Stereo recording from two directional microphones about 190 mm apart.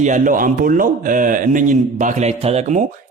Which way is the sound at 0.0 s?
40° right (ahead or behind).